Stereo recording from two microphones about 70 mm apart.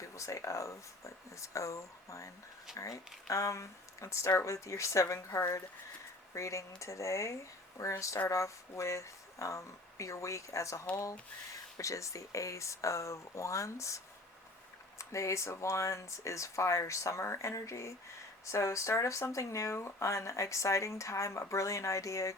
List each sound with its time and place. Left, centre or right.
0.0 s speech: left